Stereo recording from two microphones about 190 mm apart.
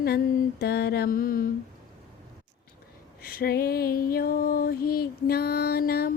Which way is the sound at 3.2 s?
50° left (ahead or behind).